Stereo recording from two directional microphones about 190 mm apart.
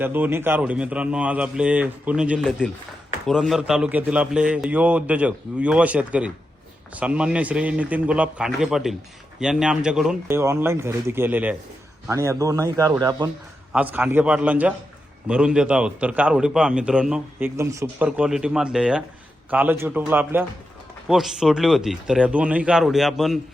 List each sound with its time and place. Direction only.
0.0 s a man's voice: 10° right (ahead or behind)
13.7 s a man's voice: 10° right (ahead or behind)